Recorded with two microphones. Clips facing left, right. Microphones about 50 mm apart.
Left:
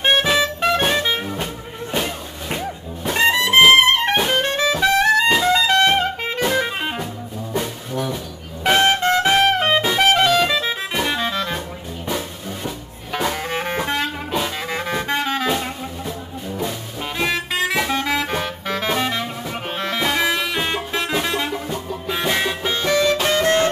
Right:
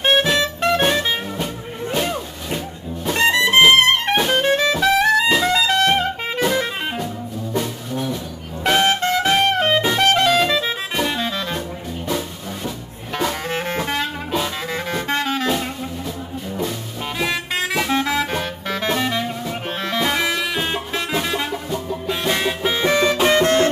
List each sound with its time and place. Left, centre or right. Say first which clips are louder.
0.0 s music: even; centre
3.1 s music: even; centre
5.8 s saxophone: left 1 dB; centre
6.4 s music: even; centre
8.6 s music: left 1 dB; centre
12.6 s music: right 1 dB; centre
17.2 s music: left 2 dB; centre
22.5 s music: right 2 dB; centre
22.8 s music: right 1 dB; centre